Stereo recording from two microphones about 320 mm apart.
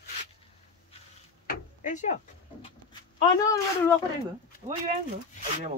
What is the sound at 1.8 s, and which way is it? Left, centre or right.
Speech, left.